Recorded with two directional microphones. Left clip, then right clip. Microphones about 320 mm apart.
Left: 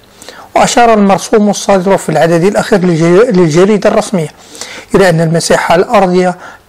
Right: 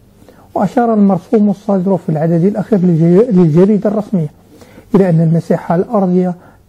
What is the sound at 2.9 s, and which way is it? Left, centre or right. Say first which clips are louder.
Speech: left 3 dB; left.